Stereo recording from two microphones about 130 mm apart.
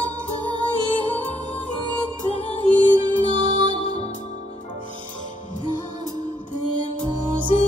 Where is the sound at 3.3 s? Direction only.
40° right (ahead or behind).